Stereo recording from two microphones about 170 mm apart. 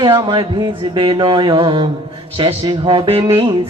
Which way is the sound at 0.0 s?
25° right (ahead or behind).